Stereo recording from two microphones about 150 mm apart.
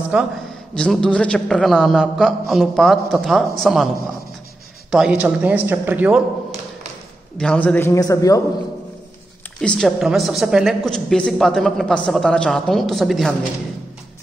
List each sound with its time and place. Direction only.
0.1 s speech: 10° right (ahead or behind)
0.7 s a woman's voice: 5° left (ahead or behind)
4.9 s speech: 5° right (ahead or behind)
7.3 s a man's voice: 10° left (ahead or behind)
9.6 s a woman's voice: 5° left (ahead or behind)